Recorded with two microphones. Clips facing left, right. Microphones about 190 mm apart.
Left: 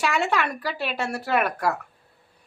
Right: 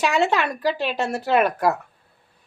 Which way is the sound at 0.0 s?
20° right (ahead or behind).